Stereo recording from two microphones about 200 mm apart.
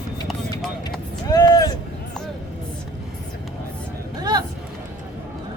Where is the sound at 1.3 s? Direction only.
20° left (ahead or behind).